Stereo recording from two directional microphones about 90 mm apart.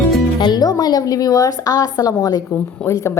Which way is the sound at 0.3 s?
55° left (ahead or behind).